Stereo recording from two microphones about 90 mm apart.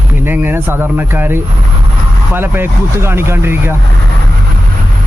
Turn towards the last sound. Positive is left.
turn(degrees=-25)  # may be behind; listen again after turning